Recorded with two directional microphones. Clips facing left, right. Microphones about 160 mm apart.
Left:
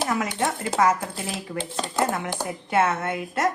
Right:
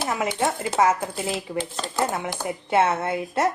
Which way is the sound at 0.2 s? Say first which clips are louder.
Right 2 dB; 25° right (ahead or behind).